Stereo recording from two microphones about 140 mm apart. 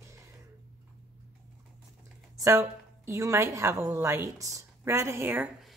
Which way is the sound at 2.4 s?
20° right (ahead or behind).